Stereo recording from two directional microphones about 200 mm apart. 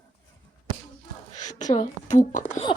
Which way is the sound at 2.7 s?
30° left (ahead or behind).